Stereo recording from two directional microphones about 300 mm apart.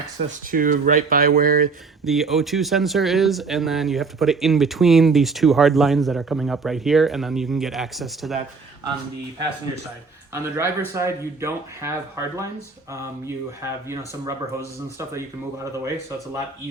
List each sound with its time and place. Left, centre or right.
0.2 s speech: right
2.0 s speech: centre
10.3 s speech: centre